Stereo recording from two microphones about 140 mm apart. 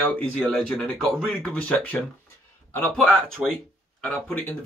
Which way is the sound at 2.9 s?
5° left (ahead or behind).